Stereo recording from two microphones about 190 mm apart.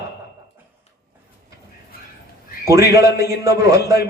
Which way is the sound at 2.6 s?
15° right (ahead or behind).